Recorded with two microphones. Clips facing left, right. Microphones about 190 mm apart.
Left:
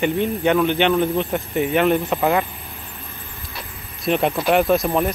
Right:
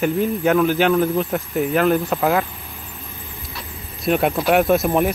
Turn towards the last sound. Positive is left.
turn(degrees=0)  # may be behind; listen again after turning